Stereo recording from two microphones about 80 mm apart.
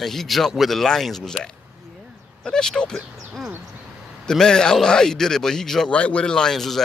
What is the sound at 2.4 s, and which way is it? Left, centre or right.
A man's voice, centre.